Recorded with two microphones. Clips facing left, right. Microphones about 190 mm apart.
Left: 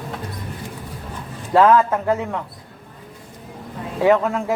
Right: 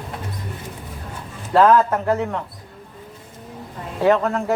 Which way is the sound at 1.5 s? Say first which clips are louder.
Even; 10° left (ahead or behind).